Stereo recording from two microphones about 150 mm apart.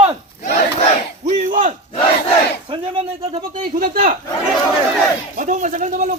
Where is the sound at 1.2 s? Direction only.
55° right (ahead or behind).